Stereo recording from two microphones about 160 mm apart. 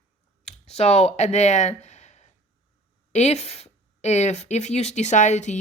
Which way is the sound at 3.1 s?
45° left (ahead or behind).